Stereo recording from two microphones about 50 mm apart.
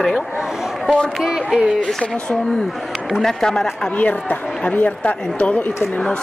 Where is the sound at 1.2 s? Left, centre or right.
Centre.